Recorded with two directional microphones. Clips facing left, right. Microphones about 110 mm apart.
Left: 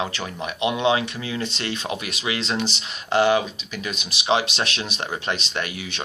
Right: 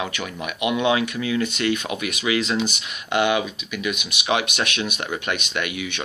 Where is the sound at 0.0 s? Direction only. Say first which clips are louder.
Even; 30° left (ahead or behind).